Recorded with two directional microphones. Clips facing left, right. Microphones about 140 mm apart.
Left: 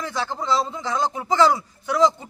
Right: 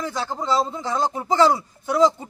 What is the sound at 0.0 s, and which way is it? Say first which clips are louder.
Speech: right 1 dB; 15° right (ahead or behind).